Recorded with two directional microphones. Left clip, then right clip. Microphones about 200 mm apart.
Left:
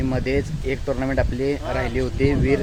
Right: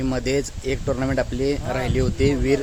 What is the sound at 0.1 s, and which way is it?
Speech, 15° right (ahead or behind).